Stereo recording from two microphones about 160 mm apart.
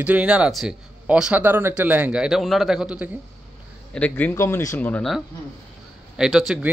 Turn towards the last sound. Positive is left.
turn(degrees=-5)  # may be behind; listen again after turning